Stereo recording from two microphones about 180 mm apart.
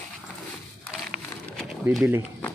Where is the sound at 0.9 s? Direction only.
Centre (ahead or behind).